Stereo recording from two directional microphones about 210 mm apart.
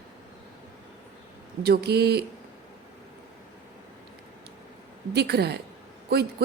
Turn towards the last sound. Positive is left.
turn(degrees=-50)  # may be behind; listen again after turning